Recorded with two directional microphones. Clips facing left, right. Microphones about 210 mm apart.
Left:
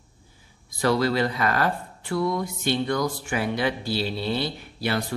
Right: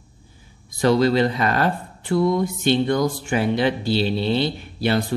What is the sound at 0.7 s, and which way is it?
Speech, 25° right (ahead or behind).